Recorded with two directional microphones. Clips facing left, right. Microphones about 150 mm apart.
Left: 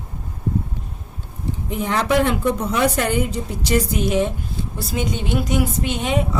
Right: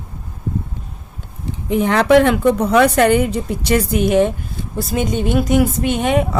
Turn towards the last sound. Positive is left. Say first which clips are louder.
# right 5 dB
turn(degrees=-55)  # may be behind; listen again after turning